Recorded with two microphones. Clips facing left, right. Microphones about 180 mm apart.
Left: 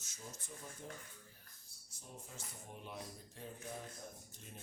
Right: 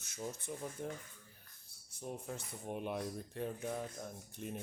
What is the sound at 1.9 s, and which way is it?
Speech, 60° right (ahead or behind).